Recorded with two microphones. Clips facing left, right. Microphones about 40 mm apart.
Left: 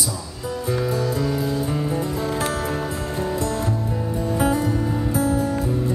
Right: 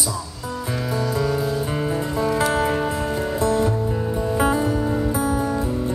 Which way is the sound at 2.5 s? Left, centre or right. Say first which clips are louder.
Right 4 dB; right.